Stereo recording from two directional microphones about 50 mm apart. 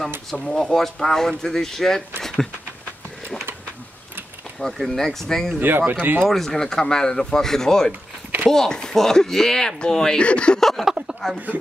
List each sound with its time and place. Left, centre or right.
0.3 s speech: centre
4.6 s speech: centre
5.6 s speech: right
6.2 s speech: centre; by 10.6 s left
10.6 s a sound: centre